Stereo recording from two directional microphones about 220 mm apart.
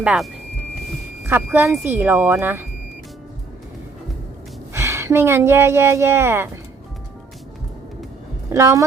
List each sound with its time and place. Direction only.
0.0 s speech: 5° right (ahead or behind)
1.3 s a woman's voice: 10° right (ahead or behind)
4.7 s speech: 10° right (ahead or behind)
8.5 s a woman's voice: 15° right (ahead or behind)